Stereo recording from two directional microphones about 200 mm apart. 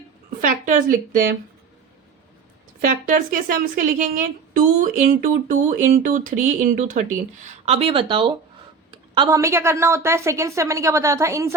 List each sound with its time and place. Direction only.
0.4 s speech: 40° right (ahead or behind)
2.8 s a woman's voice: 45° right (ahead or behind); by 11.5 s 15° right (ahead or behind)